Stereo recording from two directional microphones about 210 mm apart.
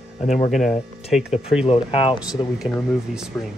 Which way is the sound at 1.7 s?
25° left (ahead or behind).